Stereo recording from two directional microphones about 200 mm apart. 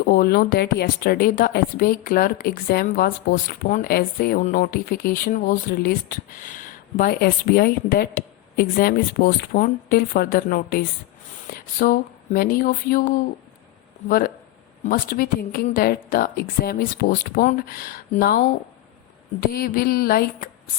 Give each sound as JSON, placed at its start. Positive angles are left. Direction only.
{"t": 0.0, "sound": "speech", "side_deg": 45}